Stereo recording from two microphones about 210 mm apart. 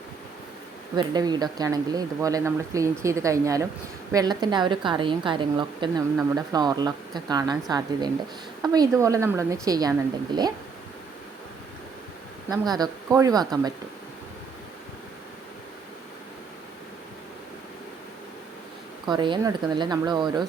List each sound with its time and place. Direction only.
0.9 s a woman's voice: 20° right (ahead or behind)
12.5 s speech: 20° right (ahead or behind)
19.0 s a woman's voice: 20° right (ahead or behind)